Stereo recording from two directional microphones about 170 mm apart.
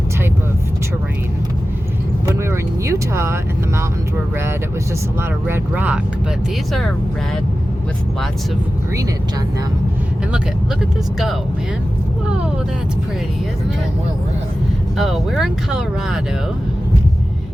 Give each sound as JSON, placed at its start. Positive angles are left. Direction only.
{"t": 2.4, "sound": "speech", "side_deg": -15}
{"t": 5.5, "sound": "speech", "side_deg": -10}
{"t": 14.9, "sound": "speech", "side_deg": 0}